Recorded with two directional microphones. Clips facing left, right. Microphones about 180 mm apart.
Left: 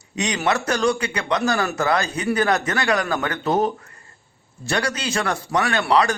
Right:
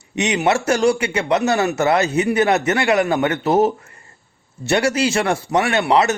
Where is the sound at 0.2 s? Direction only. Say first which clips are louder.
Right 4 dB; 25° right (ahead or behind).